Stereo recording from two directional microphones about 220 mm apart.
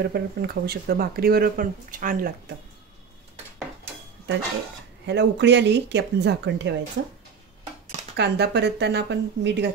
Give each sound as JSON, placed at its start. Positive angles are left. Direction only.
{"t": 0.0, "sound": "speech", "side_deg": -45}
{"t": 5.0, "sound": "speech", "side_deg": -50}
{"t": 8.2, "sound": "speech", "side_deg": -50}